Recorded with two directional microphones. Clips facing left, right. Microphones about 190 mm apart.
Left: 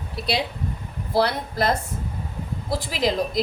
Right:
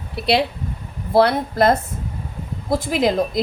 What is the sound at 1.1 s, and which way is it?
A woman's voice, 55° right (ahead or behind).